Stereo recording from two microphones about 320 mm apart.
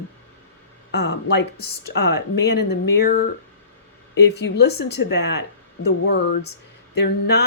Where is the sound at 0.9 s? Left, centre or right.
Left.